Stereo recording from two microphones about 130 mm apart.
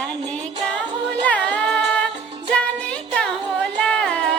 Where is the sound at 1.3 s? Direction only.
10° left (ahead or behind).